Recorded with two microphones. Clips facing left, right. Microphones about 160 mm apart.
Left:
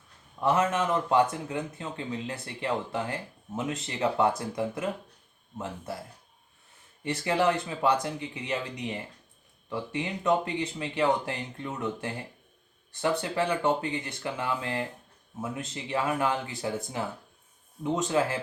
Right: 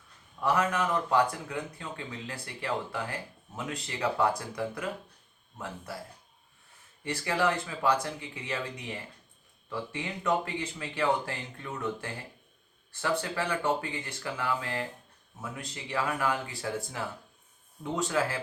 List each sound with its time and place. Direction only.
0.3 s speech: 25° left (ahead or behind)
7.0 s speech: 20° left (ahead or behind)
17.8 s speech: 20° left (ahead or behind)